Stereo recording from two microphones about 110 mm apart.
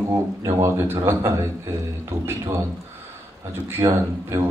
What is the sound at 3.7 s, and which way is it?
Speech, 25° right (ahead or behind).